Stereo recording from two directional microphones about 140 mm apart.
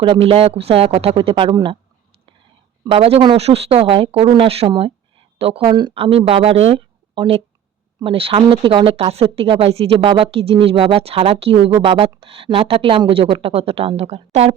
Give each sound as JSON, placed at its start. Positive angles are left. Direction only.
{"t": 0.0, "sound": "speech", "side_deg": -40}
{"t": 2.8, "sound": "speech", "side_deg": -40}